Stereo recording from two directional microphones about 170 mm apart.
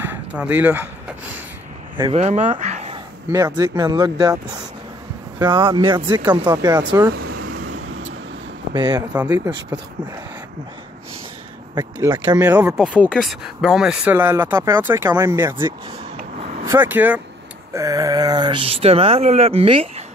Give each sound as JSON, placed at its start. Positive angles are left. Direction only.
{"t": 0.0, "sound": "speech", "side_deg": -10}
{"t": 2.1, "sound": "a sound", "side_deg": -45}
{"t": 3.3, "sound": "speech", "side_deg": -20}
{"t": 5.4, "sound": "speech", "side_deg": -25}
{"t": 8.7, "sound": "speech", "side_deg": -25}
{"t": 9.1, "sound": "speech", "side_deg": -10}
{"t": 11.7, "sound": "speech", "side_deg": -25}
{"t": 12.6, "sound": "speech", "side_deg": -5}
{"t": 16.6, "sound": "speech", "side_deg": -10}